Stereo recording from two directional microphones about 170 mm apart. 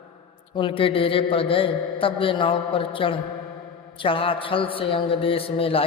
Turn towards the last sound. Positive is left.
turn(degrees=35)  # may be behind; listen again after turning